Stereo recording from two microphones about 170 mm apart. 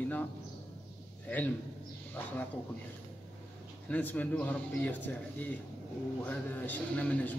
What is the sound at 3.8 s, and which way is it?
A man's voice, 10° left (ahead or behind).